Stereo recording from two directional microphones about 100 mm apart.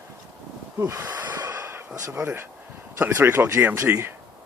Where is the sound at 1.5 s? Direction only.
25° right (ahead or behind).